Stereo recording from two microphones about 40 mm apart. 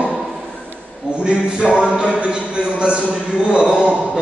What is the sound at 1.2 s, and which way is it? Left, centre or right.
Speech, right.